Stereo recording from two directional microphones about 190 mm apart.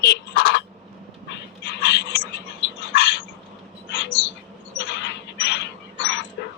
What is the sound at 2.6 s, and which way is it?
Dog, 80° left.